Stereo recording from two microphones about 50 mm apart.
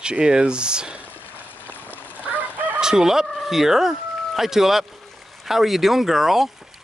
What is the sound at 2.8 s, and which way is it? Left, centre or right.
Speech, centre.